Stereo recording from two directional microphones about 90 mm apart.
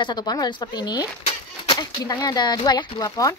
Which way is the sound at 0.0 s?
50° left (ahead or behind).